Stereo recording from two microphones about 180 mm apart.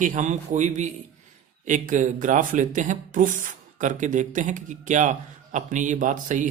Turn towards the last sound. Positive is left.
turn(degrees=-45)  # may be behind; listen again after turning